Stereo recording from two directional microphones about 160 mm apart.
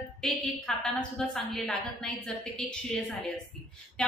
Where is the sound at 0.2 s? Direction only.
5° left (ahead or behind).